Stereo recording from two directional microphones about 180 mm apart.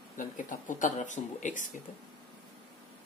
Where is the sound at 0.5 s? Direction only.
45° left (ahead or behind).